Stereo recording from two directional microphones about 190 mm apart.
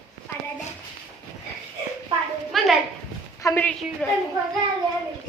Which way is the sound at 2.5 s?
Centre (ahead or behind).